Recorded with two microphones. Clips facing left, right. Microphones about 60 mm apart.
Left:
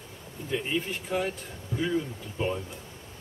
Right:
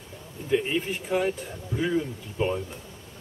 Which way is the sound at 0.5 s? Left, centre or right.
Centre.